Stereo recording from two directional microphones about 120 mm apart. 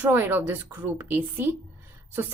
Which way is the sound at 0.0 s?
15° right (ahead or behind).